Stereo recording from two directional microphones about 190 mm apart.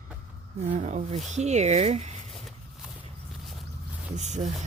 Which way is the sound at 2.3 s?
Centre (ahead or behind).